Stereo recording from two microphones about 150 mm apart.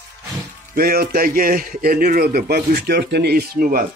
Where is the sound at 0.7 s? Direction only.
75° right (ahead or behind).